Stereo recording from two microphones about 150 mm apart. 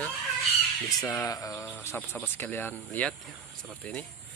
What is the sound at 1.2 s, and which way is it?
Speech, 25° left (ahead or behind).